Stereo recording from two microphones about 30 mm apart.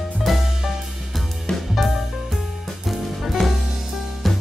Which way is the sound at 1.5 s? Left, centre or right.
Left.